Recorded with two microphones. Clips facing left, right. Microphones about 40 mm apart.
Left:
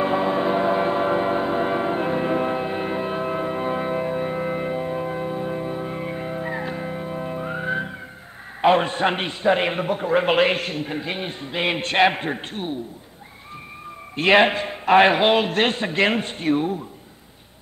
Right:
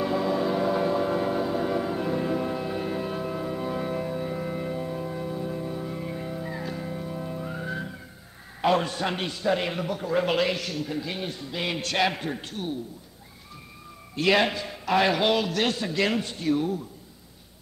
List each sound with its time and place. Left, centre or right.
0.0 s train: left
8.5 s a man's voice: left
14.1 s a man's voice: left